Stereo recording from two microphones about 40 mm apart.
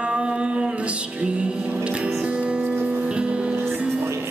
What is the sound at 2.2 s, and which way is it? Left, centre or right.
Music, right.